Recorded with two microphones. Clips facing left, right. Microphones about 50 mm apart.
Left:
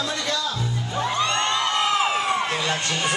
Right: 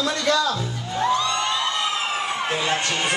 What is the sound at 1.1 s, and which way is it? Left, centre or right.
Music, left.